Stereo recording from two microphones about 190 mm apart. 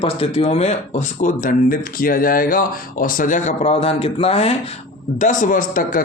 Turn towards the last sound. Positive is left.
turn(degrees=45)  # may be behind; listen again after turning